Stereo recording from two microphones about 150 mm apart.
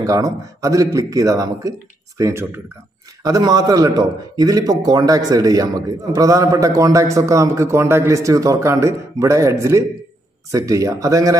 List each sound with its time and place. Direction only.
0.0 s a man's voice: 25° right (ahead or behind)